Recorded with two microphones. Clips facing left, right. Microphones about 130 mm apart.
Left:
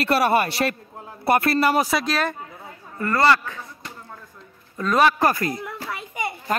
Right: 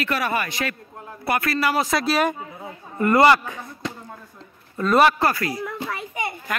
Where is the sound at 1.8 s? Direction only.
5° left (ahead or behind).